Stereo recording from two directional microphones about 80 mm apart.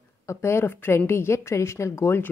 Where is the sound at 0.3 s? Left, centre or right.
Left.